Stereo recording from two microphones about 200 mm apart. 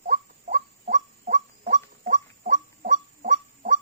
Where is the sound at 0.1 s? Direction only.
40° right (ahead or behind).